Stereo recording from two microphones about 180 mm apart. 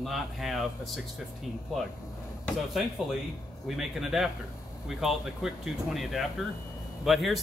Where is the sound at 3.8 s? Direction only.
Centre (ahead or behind).